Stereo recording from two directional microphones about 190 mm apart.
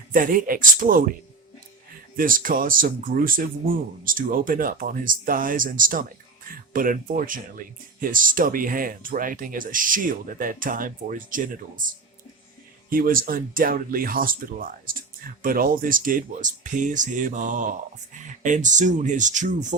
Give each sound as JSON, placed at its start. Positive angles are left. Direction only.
{"t": 0.1, "sound": "speech", "side_deg": -45}
{"t": 2.1, "sound": "speech", "side_deg": -45}